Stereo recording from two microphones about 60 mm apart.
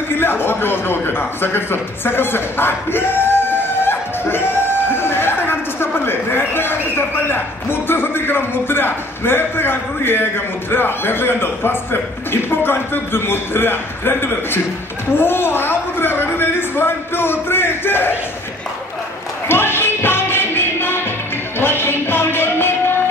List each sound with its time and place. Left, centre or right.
0.2 s a man's voice: left
15.1 s a sound: left
19.4 s music: left